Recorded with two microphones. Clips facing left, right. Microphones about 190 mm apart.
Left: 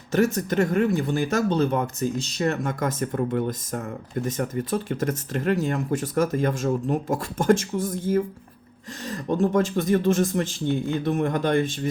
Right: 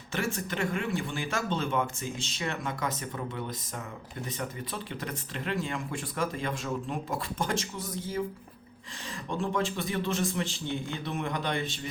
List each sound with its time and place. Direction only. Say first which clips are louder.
0.1 s speech: left 11 dB; 40° left (ahead or behind)